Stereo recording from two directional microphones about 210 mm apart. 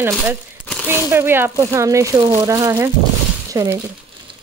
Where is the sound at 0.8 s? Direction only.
10° right (ahead or behind).